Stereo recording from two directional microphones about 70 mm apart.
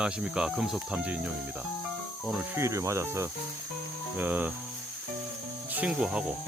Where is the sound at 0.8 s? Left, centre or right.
Centre.